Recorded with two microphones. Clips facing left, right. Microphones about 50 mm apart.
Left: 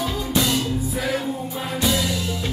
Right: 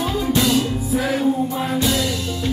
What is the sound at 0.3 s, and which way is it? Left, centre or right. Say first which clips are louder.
Music: right 3 dB; centre.